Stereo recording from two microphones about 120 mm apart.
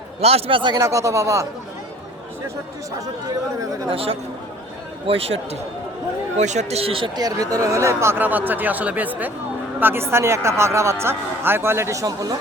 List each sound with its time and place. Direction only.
0.2 s a man's voice: 55° right (ahead or behind)
0.8 s speech: 25° right (ahead or behind)
3.8 s a man's voice: 50° right (ahead or behind)
6.3 s speech: 75° right (ahead or behind); by 7.1 s 50° right (ahead or behind)
7.2 s speech: 30° right (ahead or behind)